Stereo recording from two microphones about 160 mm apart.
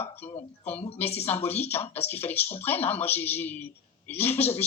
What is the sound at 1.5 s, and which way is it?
A man's voice, 10° left (ahead or behind).